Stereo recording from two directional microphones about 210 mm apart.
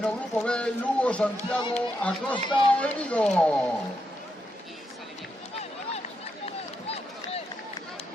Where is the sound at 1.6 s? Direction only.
20° left (ahead or behind).